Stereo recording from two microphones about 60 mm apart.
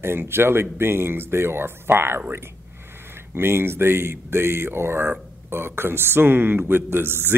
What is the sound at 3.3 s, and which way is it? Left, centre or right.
Speech, right.